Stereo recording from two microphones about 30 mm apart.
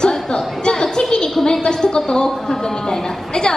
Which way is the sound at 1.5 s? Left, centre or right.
Left.